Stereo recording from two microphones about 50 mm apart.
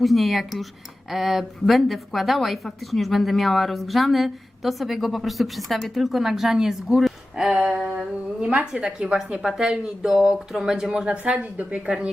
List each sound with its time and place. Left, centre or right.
0.0 s a woman's voice: centre
7.5 s a woman's voice: right
11.0 s a woman's voice: right